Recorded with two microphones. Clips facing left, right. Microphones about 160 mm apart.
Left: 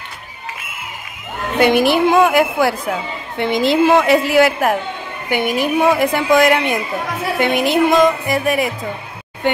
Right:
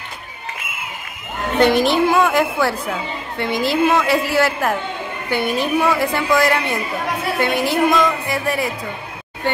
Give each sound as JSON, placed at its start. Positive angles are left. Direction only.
{"t": 1.6, "sound": "a woman's voice", "side_deg": 10}